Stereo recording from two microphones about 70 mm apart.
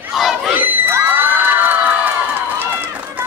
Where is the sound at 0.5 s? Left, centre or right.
Right.